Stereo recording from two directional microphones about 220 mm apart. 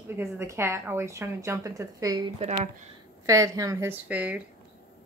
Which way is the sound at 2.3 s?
30° right (ahead or behind).